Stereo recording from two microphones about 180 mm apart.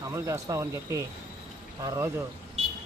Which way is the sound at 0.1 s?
15° right (ahead or behind).